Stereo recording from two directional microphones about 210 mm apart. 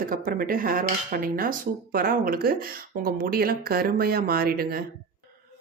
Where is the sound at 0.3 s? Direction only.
45° right (ahead or behind).